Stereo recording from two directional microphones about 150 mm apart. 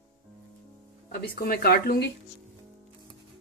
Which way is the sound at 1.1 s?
90° left.